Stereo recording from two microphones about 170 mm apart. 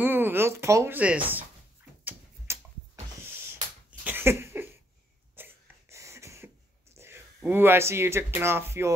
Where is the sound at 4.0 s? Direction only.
10° right (ahead or behind).